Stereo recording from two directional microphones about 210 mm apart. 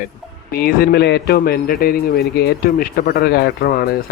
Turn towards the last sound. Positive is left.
turn(degrees=45)  # may be behind; listen again after turning